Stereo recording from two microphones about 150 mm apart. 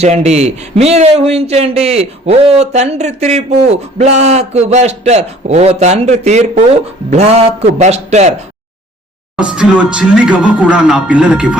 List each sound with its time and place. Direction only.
0.0 s a man's voice: 45° right (ahead or behind)
9.3 s speech: 10° right (ahead or behind)